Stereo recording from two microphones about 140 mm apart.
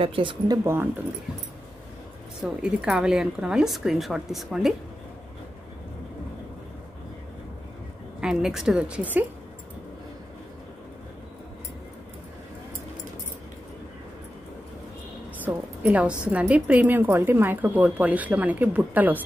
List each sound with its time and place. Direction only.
0.0 s speech: 40° right (ahead or behind)
2.4 s a woman's voice: 5° right (ahead or behind)
8.2 s a woman's voice: 5° right (ahead or behind)
15.4 s a woman's voice: 10° right (ahead or behind)